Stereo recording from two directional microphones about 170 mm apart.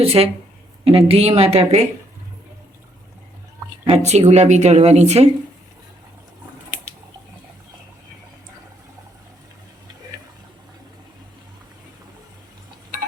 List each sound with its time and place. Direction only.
0.0 s speech: 35° right (ahead or behind)
3.8 s speech: 40° right (ahead or behind)